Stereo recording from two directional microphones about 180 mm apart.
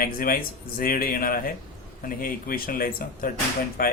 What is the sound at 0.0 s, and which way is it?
A man's voice, 55° left (ahead or behind).